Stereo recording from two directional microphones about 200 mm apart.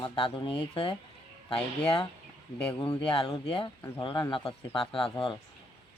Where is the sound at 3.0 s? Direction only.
25° left (ahead or behind).